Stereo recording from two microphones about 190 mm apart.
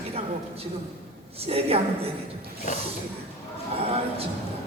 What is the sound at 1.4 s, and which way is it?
Speech, 30° right (ahead or behind).